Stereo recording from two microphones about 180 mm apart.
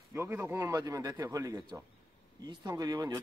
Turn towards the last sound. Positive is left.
turn(degrees=-20)  # may be behind; listen again after turning